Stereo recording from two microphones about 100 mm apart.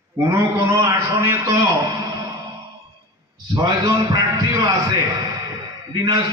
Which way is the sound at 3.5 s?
40° right (ahead or behind).